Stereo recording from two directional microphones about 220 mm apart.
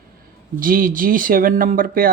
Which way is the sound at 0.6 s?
40° right (ahead or behind).